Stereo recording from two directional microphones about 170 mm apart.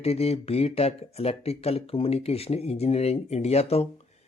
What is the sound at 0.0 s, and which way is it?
Speech, 35° left (ahead or behind).